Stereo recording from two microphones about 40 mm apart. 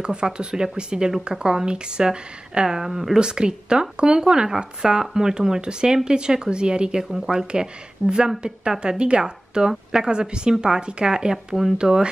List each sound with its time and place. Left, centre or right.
0.0 s a woman's voice: right
3.2 s a woman's voice: right